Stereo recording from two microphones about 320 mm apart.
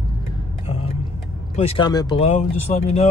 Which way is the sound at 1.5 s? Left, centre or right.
Centre.